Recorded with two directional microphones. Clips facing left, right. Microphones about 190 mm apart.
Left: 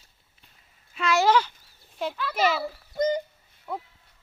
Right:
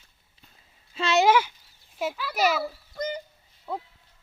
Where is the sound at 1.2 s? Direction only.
10° right (ahead or behind).